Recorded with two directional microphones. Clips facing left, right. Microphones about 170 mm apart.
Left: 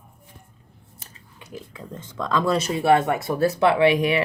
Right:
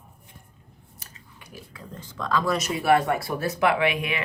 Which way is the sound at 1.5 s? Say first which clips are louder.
Left 5 dB; 25° left (ahead or behind).